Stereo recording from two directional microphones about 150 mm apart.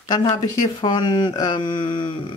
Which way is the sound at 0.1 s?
30° left (ahead or behind).